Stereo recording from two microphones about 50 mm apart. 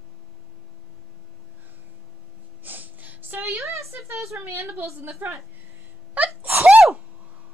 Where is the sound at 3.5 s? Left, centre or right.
Right.